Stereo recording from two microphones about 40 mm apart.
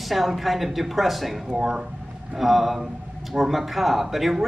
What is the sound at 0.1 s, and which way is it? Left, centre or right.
A man's voice, centre.